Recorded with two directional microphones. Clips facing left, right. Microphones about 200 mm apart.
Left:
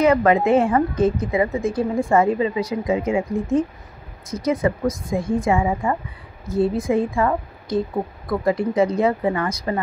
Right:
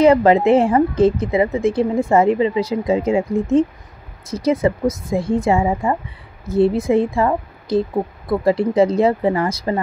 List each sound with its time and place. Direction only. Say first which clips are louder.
0.0 s a woman's voice: right 4 dB; 30° right (ahead or behind)